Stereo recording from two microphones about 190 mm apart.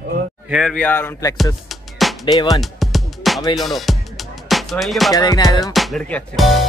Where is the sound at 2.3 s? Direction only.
20° left (ahead or behind).